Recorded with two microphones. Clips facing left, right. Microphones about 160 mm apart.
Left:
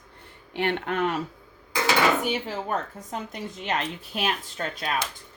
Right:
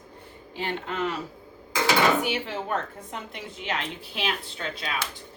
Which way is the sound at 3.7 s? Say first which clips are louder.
Left 2 dB; 45° left (ahead or behind).